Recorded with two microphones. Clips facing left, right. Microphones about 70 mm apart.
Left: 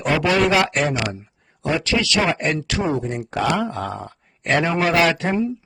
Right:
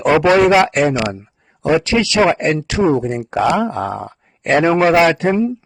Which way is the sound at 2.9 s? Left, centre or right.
Right.